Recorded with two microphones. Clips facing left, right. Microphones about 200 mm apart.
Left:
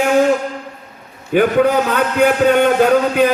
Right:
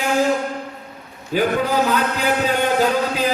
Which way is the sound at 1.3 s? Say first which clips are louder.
Left 6 dB; 60° left (ahead or behind).